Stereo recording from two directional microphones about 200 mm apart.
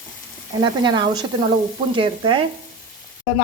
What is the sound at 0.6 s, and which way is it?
Speech, 20° right (ahead or behind).